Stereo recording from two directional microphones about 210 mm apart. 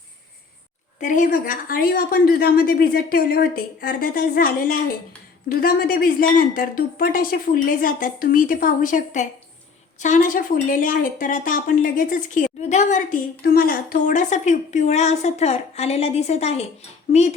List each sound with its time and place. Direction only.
0.9 s a woman's voice: 35° left (ahead or behind)